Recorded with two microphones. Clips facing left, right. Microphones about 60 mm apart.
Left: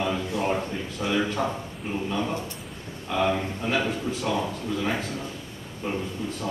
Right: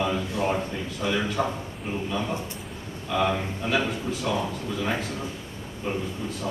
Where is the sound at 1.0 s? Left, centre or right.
Centre.